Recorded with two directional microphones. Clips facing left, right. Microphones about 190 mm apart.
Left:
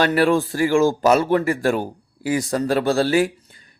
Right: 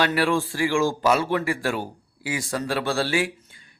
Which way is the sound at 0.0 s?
45° left (ahead or behind).